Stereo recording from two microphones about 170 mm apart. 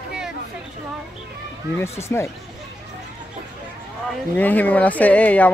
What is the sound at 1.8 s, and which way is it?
Speech, 15° left (ahead or behind).